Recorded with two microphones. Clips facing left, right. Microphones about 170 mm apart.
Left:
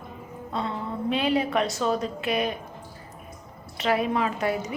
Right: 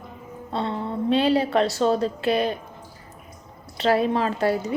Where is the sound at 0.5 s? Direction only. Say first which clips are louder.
Right 4 dB; 30° right (ahead or behind).